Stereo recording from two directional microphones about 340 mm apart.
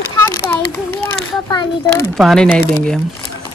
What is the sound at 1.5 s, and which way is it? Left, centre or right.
A child's voice, centre.